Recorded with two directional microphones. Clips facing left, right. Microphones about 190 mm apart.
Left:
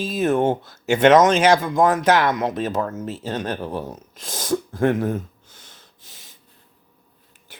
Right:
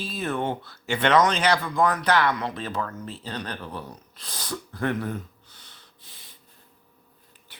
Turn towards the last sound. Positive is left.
turn(degrees=45)  # may be behind; listen again after turning